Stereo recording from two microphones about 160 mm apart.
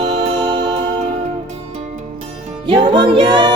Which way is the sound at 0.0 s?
45° right (ahead or behind).